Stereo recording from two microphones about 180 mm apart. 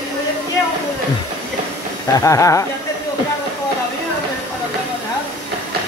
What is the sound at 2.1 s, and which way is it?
Speech, 15° left (ahead or behind).